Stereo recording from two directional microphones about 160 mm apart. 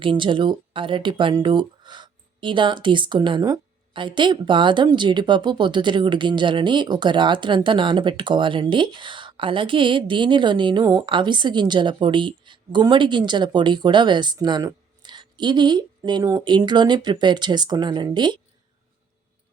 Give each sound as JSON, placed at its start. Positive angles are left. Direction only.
{"t": 0.0, "sound": "speech", "side_deg": -30}